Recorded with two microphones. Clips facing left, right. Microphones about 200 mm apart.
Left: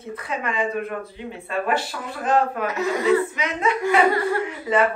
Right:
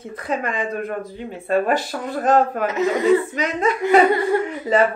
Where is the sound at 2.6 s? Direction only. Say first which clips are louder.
Right 4 dB; 20° right (ahead or behind).